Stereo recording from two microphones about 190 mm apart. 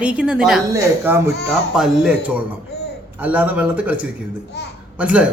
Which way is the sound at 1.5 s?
Centre (ahead or behind).